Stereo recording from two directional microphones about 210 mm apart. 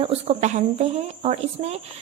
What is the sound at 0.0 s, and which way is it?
Speech, 30° right (ahead or behind).